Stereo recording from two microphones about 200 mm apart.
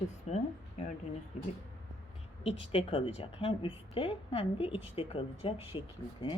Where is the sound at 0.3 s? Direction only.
35° left (ahead or behind).